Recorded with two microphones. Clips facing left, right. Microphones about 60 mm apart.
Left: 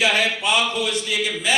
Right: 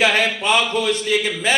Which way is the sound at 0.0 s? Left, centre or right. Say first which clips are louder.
Right 2 dB; right.